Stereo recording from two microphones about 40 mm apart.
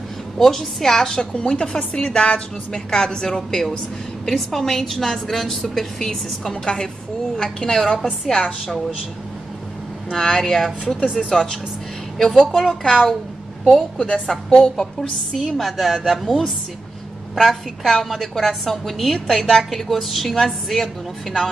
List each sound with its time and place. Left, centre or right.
0.4 s a woman's voice: centre
1.4 s a woman's voice: left
10.1 s a woman's voice: centre
13.9 s a woman's voice: left
14.2 s a woman's voice: centre